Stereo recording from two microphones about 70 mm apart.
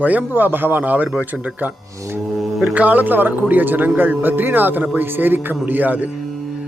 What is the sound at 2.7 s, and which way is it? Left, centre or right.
Speech, right.